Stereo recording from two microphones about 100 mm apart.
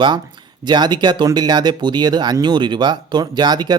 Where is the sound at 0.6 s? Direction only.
45° right (ahead or behind).